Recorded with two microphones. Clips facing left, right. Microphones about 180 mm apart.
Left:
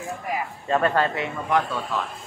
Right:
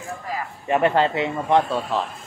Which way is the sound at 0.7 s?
15° right (ahead or behind).